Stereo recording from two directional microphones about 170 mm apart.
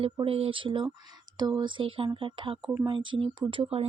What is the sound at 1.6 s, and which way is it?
Speech, 30° right (ahead or behind).